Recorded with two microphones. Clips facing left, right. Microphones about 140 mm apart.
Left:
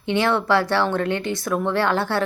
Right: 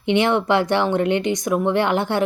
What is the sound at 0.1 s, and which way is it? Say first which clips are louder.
Speech: right 2 dB; 20° right (ahead or behind).